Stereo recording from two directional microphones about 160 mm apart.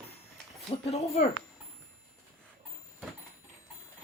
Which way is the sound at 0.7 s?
40° left (ahead or behind).